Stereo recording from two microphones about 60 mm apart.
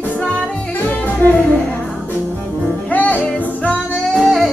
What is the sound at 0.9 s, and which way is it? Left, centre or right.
Music, left.